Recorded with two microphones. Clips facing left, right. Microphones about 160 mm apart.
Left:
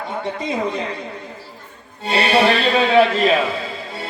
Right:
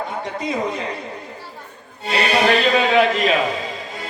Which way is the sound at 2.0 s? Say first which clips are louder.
Left 2 dB; 30° left (ahead or behind).